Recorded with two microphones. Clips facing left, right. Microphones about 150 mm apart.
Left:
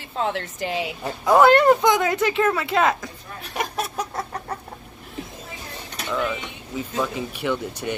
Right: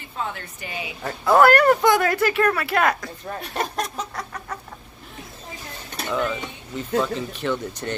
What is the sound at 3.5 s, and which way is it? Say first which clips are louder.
Speech: left 1 dB; 10° left (ahead or behind).